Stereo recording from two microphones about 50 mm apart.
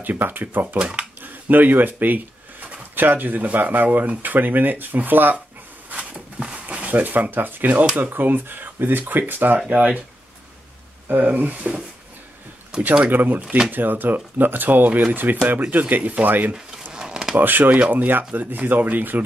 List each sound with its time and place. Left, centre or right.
0.0 s speech: right
0.7 s speech: right
1.2 s speech: right
5.9 s a sound: right
6.9 s speech: right
11.2 s speech: right
12.7 s speech: centre
13.1 s speech: right
16.9 s a sound: centre
17.4 s speech: right